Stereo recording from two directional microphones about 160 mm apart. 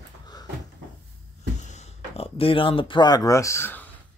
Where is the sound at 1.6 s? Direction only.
45° left (ahead or behind); by 3.9 s 15° left (ahead or behind).